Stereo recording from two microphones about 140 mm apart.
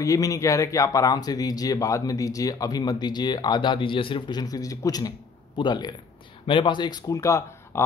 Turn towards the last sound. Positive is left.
turn(degrees=20)  # may be behind; listen again after turning